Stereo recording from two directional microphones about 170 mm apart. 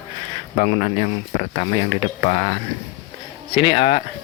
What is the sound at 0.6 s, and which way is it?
Speech, 40° left (ahead or behind).